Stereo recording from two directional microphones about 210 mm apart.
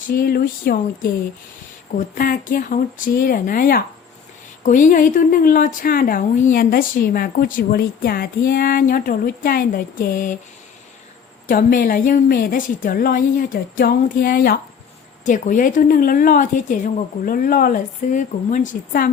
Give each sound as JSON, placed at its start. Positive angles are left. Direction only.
{"t": 0.1, "sound": "a sound", "side_deg": 45}
{"t": 2.1, "sound": "a woman's voice", "side_deg": 40}
{"t": 11.4, "sound": "a woman's voice", "side_deg": 40}